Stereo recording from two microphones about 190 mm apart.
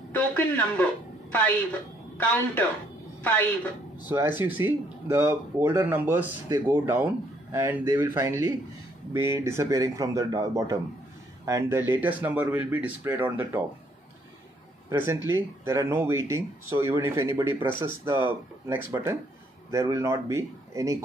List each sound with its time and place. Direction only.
0.1 s a woman's voice: 5° left (ahead or behind)
4.1 s speech: 15° right (ahead or behind)
14.9 s speech: 15° right (ahead or behind)